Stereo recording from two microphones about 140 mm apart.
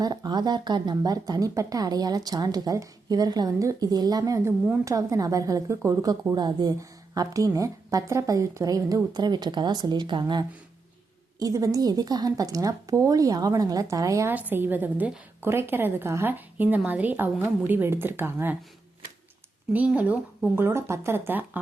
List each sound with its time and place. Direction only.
0.0 s a woman's voice: 30° right (ahead or behind)
19.7 s a woman's voice: 10° right (ahead or behind)